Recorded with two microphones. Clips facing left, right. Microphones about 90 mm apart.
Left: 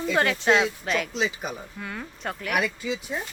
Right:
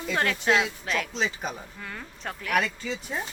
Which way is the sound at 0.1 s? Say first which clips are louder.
Left 2 dB; centre (ahead or behind).